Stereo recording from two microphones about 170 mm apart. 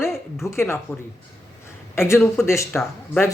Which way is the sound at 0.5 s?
15° left (ahead or behind).